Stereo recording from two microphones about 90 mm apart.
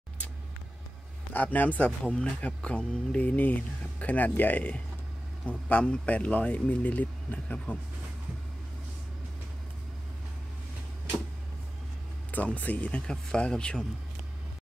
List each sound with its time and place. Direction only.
1.3 s speech: 20° left (ahead or behind)
12.3 s speech: 15° left (ahead or behind)